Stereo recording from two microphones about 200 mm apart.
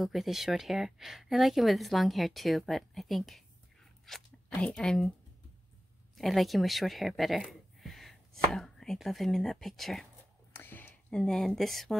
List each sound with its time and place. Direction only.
0.0 s speech: centre (ahead or behind)
6.1 s speech: centre (ahead or behind)
10.5 s a sound: 10° left (ahead or behind)